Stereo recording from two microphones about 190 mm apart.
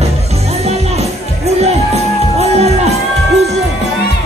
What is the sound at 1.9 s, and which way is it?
Music, 35° right (ahead or behind).